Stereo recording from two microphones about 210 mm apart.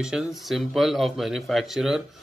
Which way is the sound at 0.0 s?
Centre (ahead or behind).